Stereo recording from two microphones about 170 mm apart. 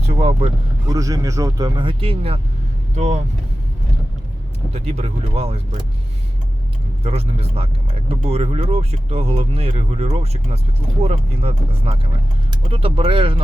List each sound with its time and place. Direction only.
0.0 s speech: 35° right (ahead or behind)
0.9 s a man's voice: 20° right (ahead or behind); by 3.2 s 40° right (ahead or behind)
4.7 s speech: 40° right (ahead or behind)
7.0 s speech: 35° right (ahead or behind)